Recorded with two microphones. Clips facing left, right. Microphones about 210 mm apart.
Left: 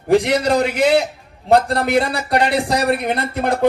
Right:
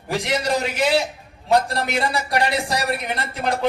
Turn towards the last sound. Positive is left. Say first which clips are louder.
# left 5 dB
turn(degrees=55)  # may be behind; listen again after turning